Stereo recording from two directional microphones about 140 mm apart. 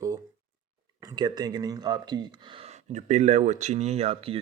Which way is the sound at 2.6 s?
55° right (ahead or behind).